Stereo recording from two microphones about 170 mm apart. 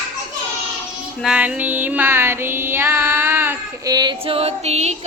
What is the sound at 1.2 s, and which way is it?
Music, 5° right (ahead or behind).